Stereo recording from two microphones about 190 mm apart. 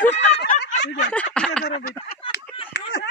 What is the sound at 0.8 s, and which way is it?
Speech, 65° left (ahead or behind).